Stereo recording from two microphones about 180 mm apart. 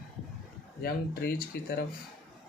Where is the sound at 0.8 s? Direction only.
55° left (ahead or behind).